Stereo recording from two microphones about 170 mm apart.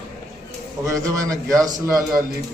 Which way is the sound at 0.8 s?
20° right (ahead or behind).